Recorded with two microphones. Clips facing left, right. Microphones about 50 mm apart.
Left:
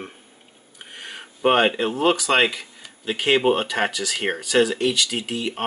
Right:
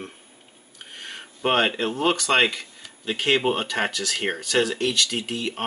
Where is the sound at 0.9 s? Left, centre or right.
Centre.